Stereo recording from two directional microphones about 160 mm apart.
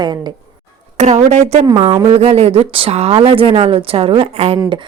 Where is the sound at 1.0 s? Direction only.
45° right (ahead or behind).